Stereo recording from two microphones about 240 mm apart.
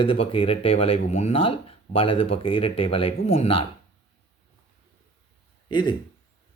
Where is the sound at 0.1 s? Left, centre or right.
Left.